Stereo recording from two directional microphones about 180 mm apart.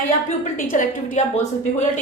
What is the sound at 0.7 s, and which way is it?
Speech, 45° left (ahead or behind).